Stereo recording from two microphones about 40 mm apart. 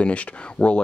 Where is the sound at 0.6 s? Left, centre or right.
Left.